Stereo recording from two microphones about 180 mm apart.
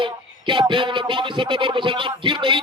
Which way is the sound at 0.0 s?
25° right (ahead or behind).